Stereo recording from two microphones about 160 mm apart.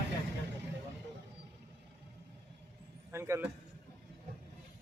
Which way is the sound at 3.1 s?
15° right (ahead or behind).